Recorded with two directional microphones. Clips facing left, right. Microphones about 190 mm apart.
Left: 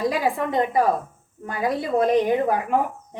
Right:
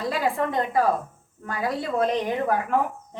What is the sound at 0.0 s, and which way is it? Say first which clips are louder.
A woman's voice: left 2 dB; 15° left (ahead or behind).